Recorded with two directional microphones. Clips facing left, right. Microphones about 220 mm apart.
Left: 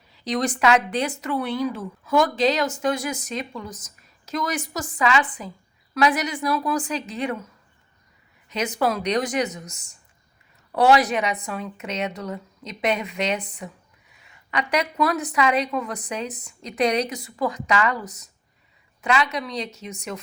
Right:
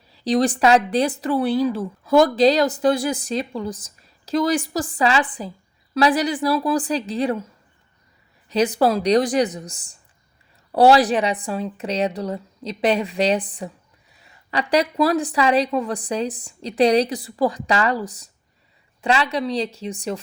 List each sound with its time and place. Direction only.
0.1 s speech: 30° right (ahead or behind)
8.4 s speech: 35° right (ahead or behind)